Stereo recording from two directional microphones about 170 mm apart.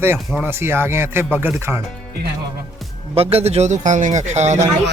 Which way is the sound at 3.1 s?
35° right (ahead or behind).